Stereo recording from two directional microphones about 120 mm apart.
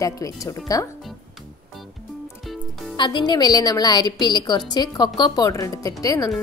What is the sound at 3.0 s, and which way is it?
A woman's voice, 40° left (ahead or behind).